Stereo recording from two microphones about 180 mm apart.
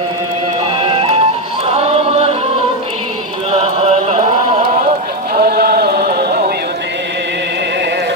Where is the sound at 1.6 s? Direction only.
35° right (ahead or behind).